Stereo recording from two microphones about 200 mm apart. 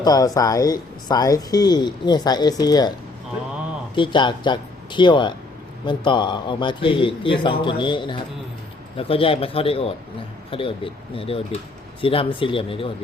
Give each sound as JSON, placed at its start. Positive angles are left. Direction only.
{"t": 0.0, "sound": "speech", "side_deg": 20}
{"t": 3.9, "sound": "speech", "side_deg": 25}